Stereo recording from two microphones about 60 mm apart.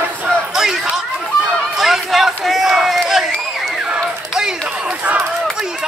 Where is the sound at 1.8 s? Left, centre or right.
Centre.